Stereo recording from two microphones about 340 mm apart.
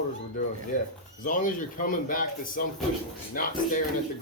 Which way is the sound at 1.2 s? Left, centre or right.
Left.